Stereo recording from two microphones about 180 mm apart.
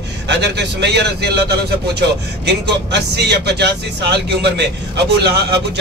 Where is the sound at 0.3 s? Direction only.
70° right (ahead or behind).